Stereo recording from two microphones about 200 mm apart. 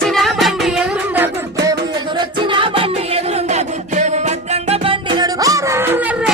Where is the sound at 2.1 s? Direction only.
25° right (ahead or behind).